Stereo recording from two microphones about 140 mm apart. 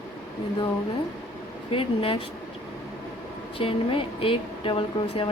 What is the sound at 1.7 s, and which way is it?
Speech, 40° left (ahead or behind).